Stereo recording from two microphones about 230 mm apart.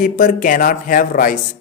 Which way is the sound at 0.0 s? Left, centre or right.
Left.